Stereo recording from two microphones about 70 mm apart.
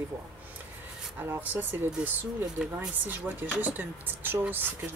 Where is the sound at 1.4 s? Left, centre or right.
Right.